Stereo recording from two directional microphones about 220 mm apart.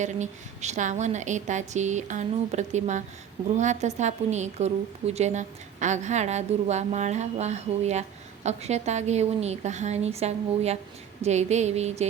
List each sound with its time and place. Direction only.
0.0 s a woman's voice: 30° right (ahead or behind)